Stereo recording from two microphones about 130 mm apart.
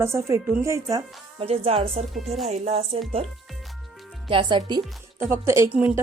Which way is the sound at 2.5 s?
55° right (ahead or behind).